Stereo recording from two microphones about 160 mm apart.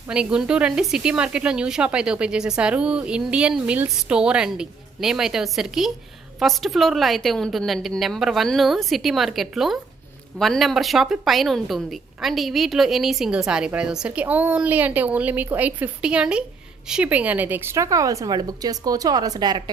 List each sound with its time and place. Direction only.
0.1 s a woman's voice: 5° right (ahead or behind); by 19.7 s 25° right (ahead or behind)